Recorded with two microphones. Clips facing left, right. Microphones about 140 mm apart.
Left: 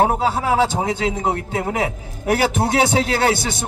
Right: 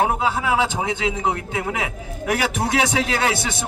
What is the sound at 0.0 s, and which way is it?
A man's voice, 40° left (ahead or behind).